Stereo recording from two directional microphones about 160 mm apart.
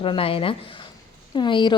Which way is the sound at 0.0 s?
35° left (ahead or behind).